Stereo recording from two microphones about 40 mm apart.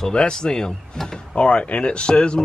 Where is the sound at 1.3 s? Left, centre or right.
Left.